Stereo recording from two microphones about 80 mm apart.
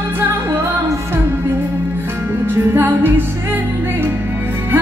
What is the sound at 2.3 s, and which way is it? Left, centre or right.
Music, right.